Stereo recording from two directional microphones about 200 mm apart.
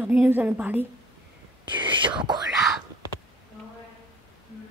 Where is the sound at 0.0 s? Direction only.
5° right (ahead or behind).